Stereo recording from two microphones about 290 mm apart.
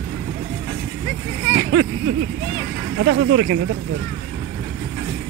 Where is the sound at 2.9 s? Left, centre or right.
Right.